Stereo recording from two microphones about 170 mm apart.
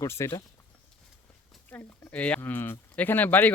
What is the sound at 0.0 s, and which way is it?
Speech, 15° left (ahead or behind).